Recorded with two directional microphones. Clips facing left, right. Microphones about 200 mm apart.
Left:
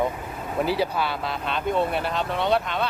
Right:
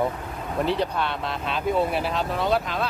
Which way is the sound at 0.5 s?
5° left (ahead or behind).